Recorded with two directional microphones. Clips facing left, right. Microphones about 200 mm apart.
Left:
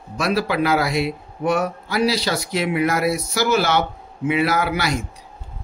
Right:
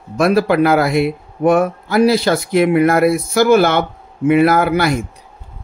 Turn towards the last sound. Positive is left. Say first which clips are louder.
# right 7 dB
turn(degrees=-55)  # may be behind; listen again after turning